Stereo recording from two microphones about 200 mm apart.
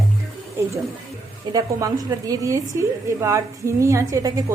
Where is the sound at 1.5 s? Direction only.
15° right (ahead or behind).